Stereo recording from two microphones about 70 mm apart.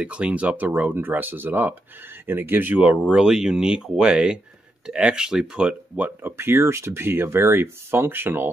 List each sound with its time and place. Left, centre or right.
0.0 s speech: centre
3.1 s speech: centre
6.0 s speech: right